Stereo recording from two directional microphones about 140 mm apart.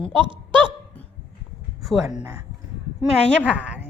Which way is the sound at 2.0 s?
30° right (ahead or behind).